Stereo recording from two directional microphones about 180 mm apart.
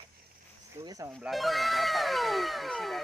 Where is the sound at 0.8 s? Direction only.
20° right (ahead or behind).